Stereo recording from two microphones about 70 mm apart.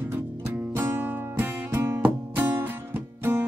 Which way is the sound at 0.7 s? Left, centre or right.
Right.